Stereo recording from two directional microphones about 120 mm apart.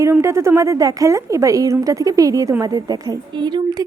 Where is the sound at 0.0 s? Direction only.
25° right (ahead or behind).